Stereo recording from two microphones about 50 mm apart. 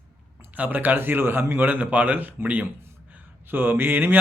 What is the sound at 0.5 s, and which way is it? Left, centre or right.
A man's voice, right.